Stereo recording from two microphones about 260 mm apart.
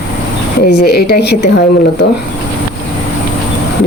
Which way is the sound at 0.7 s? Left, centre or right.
Left.